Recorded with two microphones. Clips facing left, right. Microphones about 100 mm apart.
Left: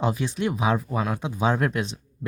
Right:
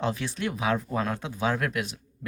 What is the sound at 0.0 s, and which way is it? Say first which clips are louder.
Speech: left 4 dB; 15° left (ahead or behind).